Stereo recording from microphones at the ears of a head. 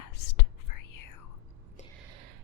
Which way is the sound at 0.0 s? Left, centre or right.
Left.